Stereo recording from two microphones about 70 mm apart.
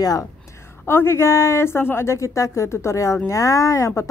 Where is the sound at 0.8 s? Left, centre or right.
Left.